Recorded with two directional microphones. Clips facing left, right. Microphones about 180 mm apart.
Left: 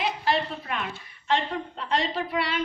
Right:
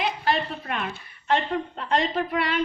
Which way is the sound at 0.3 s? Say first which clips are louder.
Even; 45° right (ahead or behind).